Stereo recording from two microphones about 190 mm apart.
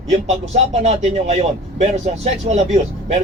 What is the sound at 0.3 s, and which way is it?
Speech, 35° right (ahead or behind).